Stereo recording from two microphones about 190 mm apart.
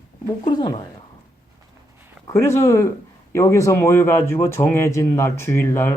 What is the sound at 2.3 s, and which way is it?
Speech, 15° left (ahead or behind).